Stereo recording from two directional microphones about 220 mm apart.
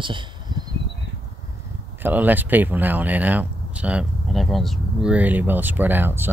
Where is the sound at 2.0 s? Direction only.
10° right (ahead or behind).